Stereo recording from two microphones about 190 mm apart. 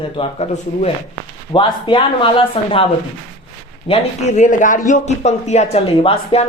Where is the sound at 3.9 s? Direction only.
35° left (ahead or behind).